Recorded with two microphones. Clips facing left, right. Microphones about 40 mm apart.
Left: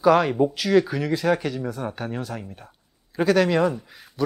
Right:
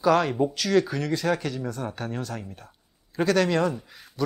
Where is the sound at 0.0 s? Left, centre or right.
Centre.